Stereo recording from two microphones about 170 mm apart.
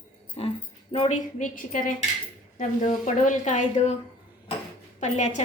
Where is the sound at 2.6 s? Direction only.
50° left (ahead or behind).